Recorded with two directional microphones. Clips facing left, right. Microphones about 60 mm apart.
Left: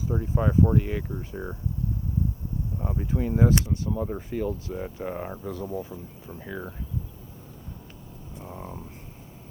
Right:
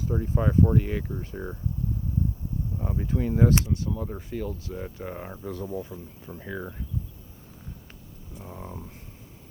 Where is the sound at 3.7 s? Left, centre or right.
Left.